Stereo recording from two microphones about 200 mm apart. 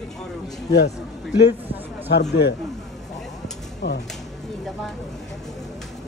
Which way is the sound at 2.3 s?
60° left (ahead or behind).